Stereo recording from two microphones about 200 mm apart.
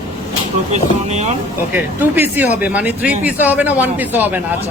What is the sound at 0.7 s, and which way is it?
Speech, 35° right (ahead or behind).